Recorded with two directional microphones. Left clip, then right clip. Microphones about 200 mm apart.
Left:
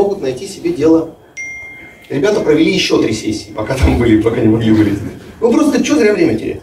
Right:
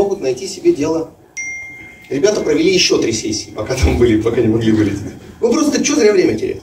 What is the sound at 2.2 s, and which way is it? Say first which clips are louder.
A man's voice: left 2 dB; 35° right (ahead or behind).